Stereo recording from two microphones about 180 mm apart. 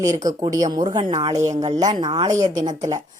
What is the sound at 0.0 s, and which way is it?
A woman's voice, 20° right (ahead or behind).